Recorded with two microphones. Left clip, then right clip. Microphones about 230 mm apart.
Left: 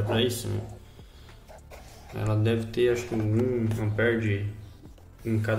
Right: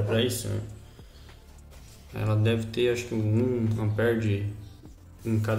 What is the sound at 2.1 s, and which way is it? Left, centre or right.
Speech, centre.